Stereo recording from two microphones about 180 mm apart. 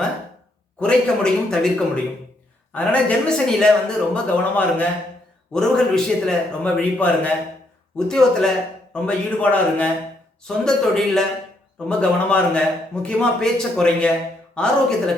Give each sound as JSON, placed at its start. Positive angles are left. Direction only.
{"t": 0.8, "sound": "a man's voice", "side_deg": 5}
{"t": 2.7, "sound": "a man's voice", "side_deg": 5}